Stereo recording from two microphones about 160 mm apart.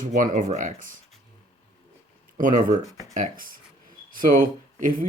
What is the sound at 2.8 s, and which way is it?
Speech, 20° right (ahead or behind).